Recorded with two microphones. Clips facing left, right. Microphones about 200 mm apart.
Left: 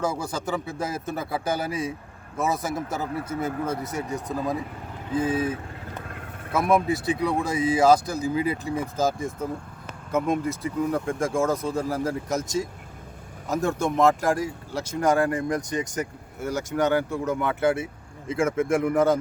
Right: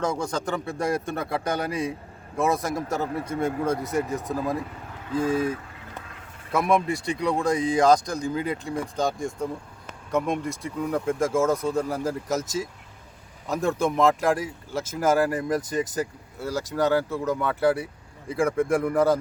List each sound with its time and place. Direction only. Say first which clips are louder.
0.0 s speech: right 1 dB; 5° left (ahead or behind)
6.1 s a sound: left 7 dB; 55° left (ahead or behind)
6.5 s speech: left 1 dB; centre (ahead or behind)
16.5 s speech: even; centre (ahead or behind)